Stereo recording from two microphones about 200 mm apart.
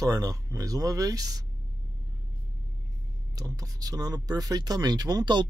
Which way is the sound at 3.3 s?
15° right (ahead or behind).